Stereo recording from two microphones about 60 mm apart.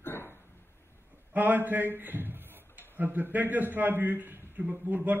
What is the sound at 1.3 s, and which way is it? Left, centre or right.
A man's voice, right.